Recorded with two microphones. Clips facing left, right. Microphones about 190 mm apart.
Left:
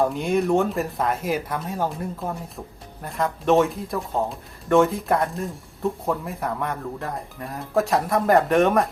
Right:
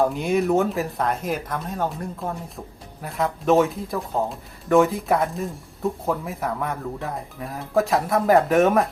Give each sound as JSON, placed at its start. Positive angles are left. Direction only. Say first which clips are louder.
{"t": 0.0, "sound": "speech", "louder": "right 1 dB", "side_deg": 0}
{"t": 3.0, "sound": "speech", "louder": "right 1 dB", "side_deg": 0}